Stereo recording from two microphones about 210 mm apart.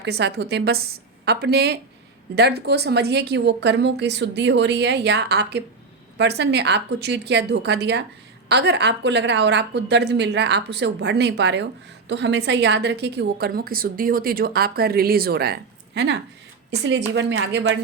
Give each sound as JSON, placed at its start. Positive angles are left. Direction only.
{"t": 0.0, "sound": "a woman's voice", "side_deg": -55}